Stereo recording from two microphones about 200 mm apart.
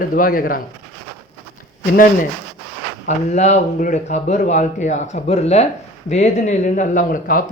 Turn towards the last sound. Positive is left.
turn(degrees=45)  # may be behind; listen again after turning